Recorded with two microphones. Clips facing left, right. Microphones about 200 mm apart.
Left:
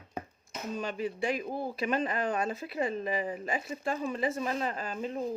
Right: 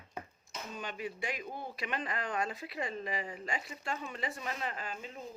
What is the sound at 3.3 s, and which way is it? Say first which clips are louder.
A man's voice: left 6 dB; 25° left (ahead or behind).